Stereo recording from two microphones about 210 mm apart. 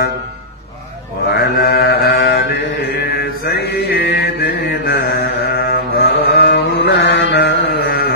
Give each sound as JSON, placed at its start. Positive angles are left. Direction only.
{"t": 1.3, "sound": "mantra", "side_deg": 50}